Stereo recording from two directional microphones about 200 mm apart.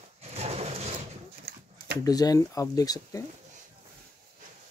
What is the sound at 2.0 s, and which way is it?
Speech, 20° left (ahead or behind).